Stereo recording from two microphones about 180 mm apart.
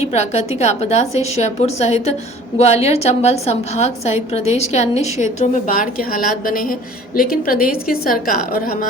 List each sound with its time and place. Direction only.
0.0 s a woman's voice: 35° left (ahead or behind); by 8.6 s 55° left (ahead or behind)